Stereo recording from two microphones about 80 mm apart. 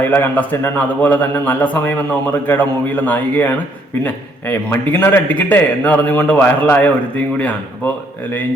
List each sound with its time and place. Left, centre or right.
0.0 s a man's voice: left